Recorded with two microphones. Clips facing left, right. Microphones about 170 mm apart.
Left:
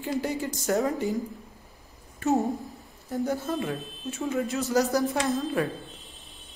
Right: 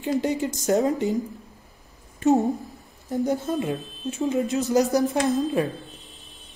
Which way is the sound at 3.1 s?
20° right (ahead or behind).